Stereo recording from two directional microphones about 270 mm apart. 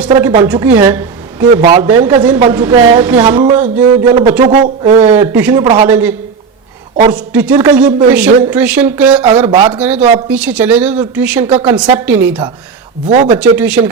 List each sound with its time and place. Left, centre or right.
0.1 s a woman's voice: centre
3.2 s a woman's voice: centre
5.2 s a woman's voice: centre
5.6 s speech: centre
5.9 s a woman's voice: centre
9.5 s speech: centre
9.7 s a woman's voice: centre
13.1 s speech: right
13.6 s a woman's voice: centre